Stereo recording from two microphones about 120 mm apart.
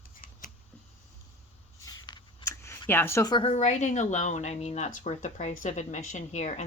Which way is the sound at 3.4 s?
70° left (ahead or behind).